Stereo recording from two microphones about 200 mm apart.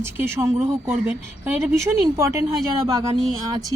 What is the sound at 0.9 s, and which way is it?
Speech, 10° right (ahead or behind).